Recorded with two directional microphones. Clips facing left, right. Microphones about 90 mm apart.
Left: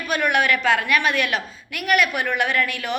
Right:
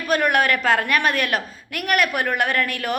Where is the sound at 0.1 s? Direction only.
45° right (ahead or behind).